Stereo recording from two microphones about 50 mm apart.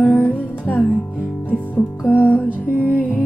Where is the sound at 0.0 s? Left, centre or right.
Left.